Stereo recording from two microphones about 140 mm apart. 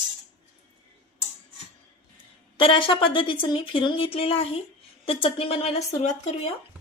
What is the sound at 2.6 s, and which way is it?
Speech, 40° left (ahead or behind).